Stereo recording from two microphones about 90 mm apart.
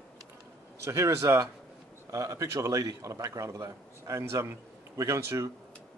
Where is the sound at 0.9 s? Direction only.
35° right (ahead or behind).